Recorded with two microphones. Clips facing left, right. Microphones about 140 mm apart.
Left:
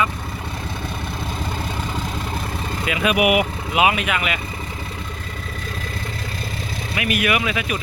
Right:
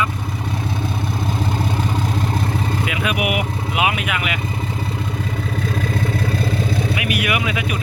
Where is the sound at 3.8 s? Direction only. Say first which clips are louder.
Left 3 dB; 5° right (ahead or behind).